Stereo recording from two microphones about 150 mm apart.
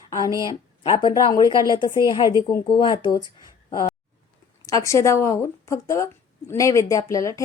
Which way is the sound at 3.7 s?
30° left (ahead or behind).